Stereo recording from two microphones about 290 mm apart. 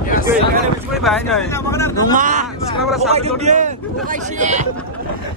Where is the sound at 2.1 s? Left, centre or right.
Right.